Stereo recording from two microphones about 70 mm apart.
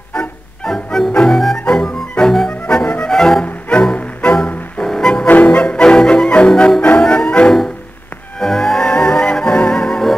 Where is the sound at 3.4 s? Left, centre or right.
Left.